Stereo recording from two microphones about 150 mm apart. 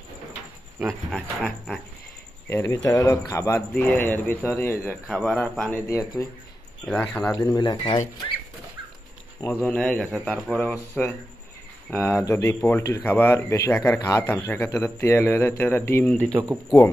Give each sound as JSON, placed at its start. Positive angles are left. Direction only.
{"t": 0.7, "sound": "speech", "side_deg": -10}
{"t": 2.5, "sound": "a man's voice", "side_deg": 20}
{"t": 6.9, "sound": "a man's voice", "side_deg": 5}
{"t": 7.3, "sound": "speech", "side_deg": 25}
{"t": 9.7, "sound": "a man's voice", "side_deg": 5}